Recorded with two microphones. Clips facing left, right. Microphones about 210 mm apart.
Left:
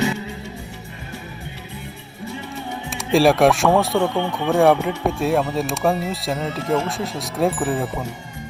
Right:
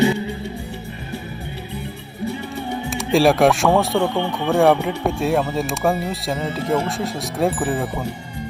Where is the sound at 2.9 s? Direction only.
Centre (ahead or behind).